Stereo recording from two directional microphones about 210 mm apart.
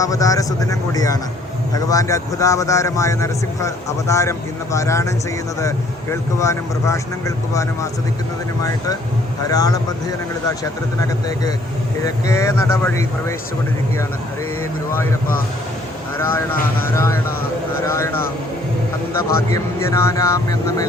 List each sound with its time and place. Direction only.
0.0 s a man's voice: 15° left (ahead or behind)
9.5 s a man's voice: 15° left (ahead or behind)
16.1 s a man's voice: 10° left (ahead or behind)
19.5 s a man's voice: 15° left (ahead or behind)